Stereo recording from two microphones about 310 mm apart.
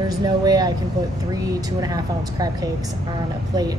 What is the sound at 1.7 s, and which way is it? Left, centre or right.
Speech, centre.